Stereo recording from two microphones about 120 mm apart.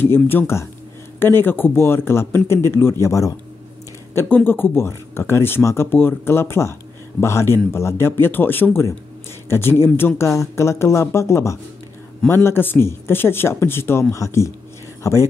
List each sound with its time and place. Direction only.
0.0 s speech: 15° left (ahead or behind)